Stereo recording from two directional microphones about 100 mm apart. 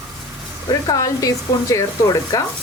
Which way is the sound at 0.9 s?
35° left (ahead or behind).